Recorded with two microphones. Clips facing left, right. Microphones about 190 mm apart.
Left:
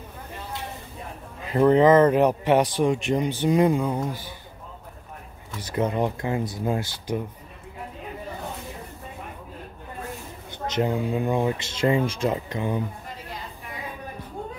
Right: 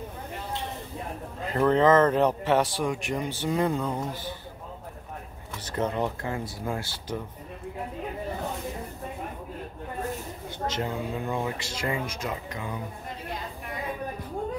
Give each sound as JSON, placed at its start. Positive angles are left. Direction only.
{"t": 1.5, "sound": "a man's voice", "side_deg": 15}
{"t": 5.6, "sound": "a man's voice", "side_deg": 10}
{"t": 10.7, "sound": "speech", "side_deg": 15}